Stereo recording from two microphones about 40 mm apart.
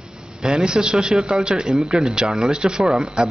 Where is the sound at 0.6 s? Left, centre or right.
Centre.